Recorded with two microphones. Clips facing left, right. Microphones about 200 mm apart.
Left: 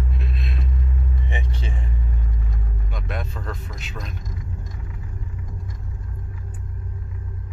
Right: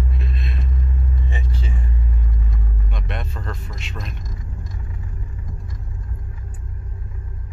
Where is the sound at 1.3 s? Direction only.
20° left (ahead or behind).